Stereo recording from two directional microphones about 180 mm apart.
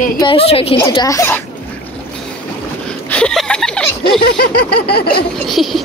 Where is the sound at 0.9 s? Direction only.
20° left (ahead or behind).